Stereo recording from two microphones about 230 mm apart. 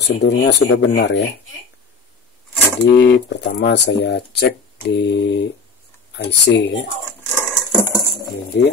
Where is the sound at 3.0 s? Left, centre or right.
Left.